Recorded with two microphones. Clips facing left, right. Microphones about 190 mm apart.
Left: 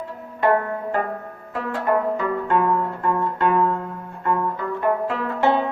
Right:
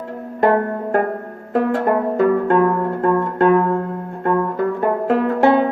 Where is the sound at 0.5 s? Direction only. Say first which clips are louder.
Right 4 dB; 45° right (ahead or behind).